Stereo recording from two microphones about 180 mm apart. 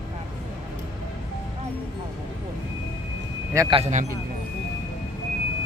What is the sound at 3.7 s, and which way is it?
Speech, 40° right (ahead or behind).